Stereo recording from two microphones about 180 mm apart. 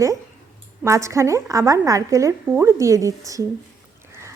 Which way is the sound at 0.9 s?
15° right (ahead or behind).